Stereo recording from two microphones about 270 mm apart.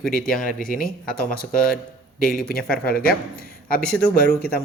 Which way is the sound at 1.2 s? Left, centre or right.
Centre.